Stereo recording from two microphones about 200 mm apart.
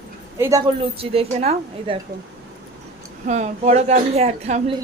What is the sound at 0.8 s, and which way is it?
Speech, 30° right (ahead or behind).